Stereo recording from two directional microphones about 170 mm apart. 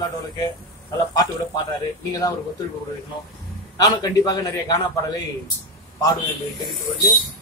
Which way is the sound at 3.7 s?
20° left (ahead or behind).